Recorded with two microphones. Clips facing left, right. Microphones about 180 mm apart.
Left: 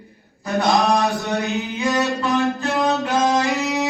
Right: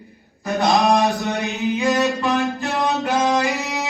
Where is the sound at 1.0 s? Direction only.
15° right (ahead or behind).